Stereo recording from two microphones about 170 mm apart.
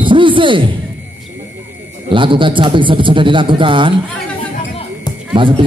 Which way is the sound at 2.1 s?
30° right (ahead or behind).